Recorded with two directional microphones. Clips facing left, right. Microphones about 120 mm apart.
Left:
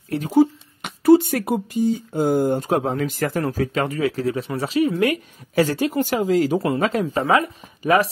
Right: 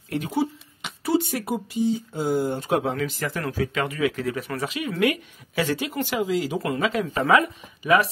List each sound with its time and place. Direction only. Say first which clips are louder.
0.1 s speech: left 8 dB; 40° left (ahead or behind)
3.4 s speech: left 4 dB; 35° left (ahead or behind)